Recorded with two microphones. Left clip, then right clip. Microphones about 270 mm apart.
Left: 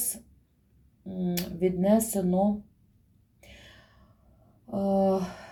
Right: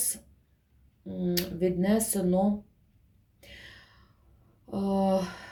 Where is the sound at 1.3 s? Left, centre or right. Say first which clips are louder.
Even; right.